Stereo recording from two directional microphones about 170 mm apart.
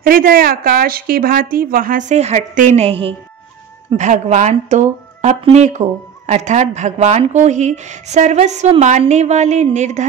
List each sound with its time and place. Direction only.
0.0 s speech: 60° right (ahead or behind); by 10.0 s 45° right (ahead or behind)